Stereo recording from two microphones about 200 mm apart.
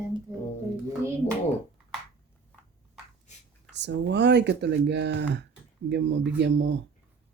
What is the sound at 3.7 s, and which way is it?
Speech, 60° right (ahead or behind).